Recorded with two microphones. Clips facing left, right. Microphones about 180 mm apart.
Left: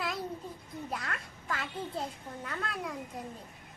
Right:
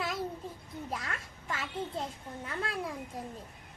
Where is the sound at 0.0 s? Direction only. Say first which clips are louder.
Right 1 dB; centre (ahead or behind).